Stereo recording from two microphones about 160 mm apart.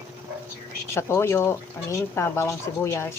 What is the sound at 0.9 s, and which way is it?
Speech, 15° left (ahead or behind).